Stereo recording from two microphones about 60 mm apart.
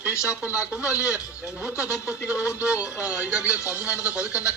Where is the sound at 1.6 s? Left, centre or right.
Left.